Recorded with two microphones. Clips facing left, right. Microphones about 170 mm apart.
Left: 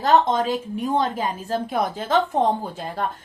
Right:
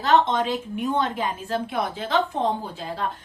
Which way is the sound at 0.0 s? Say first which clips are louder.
Left 2 dB; 40° left (ahead or behind).